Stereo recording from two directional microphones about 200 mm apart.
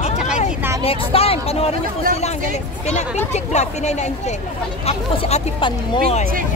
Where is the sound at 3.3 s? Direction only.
35° left (ahead or behind).